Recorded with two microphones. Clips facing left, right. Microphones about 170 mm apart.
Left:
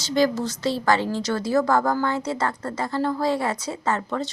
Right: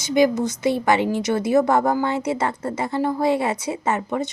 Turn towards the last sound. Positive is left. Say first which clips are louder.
# right 2 dB
turn(degrees=-20)  # may be behind; listen again after turning